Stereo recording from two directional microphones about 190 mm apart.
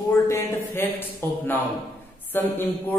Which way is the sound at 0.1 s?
15° left (ahead or behind).